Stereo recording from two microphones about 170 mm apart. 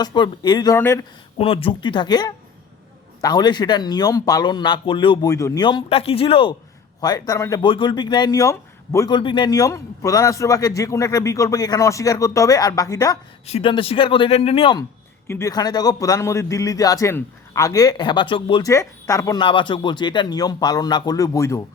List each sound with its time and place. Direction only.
0.0 s a man's voice: 25° left (ahead or behind)
1.4 s a man's voice: 35° left (ahead or behind)
7.0 s a man's voice: 20° left (ahead or behind)
7.6 s a man's voice: 30° left (ahead or behind)
13.5 s speech: 30° left (ahead or behind)
15.3 s a man's voice: 15° left (ahead or behind)